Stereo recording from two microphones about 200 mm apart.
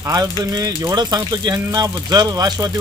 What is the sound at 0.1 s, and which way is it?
Speech, 20° right (ahead or behind).